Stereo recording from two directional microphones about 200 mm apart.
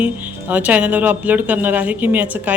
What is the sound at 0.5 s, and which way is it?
Speech, 5° right (ahead or behind).